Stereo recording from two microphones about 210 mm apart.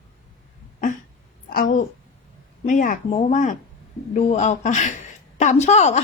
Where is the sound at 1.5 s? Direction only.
45° left (ahead or behind).